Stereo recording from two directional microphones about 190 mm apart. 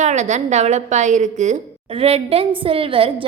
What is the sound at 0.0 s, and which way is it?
A woman's voice, 40° right (ahead or behind).